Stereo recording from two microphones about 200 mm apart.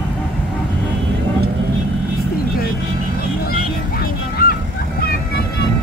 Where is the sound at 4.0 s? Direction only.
45° left (ahead or behind).